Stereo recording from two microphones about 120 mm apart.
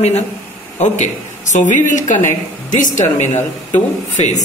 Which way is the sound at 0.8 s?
85° left.